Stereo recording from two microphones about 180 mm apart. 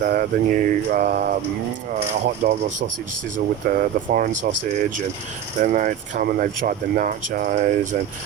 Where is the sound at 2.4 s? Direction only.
40° right (ahead or behind).